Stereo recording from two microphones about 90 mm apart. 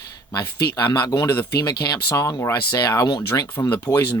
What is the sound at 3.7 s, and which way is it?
Speech, 25° left (ahead or behind).